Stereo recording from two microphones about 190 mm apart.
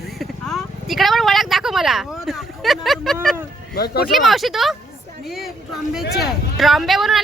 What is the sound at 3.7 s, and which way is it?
Speech, 55° left (ahead or behind).